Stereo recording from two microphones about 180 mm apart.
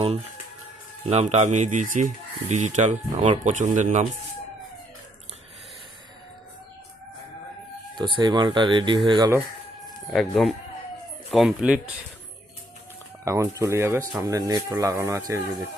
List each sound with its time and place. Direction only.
1.0 s speech: 35° right (ahead or behind)
7.9 s speech: 25° right (ahead or behind)
10.1 s speech: centre (ahead or behind)
13.2 s speech: 15° right (ahead or behind)